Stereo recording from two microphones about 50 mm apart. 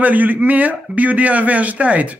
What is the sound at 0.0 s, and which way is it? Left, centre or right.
A man's voice, right.